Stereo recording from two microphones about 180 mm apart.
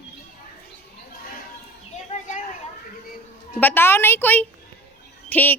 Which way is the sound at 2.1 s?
40° left (ahead or behind).